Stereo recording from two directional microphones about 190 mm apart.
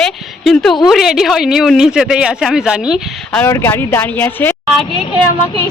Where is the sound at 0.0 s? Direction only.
Centre (ahead or behind).